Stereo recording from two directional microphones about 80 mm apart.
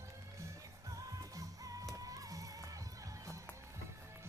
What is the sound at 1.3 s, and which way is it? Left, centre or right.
Music, right.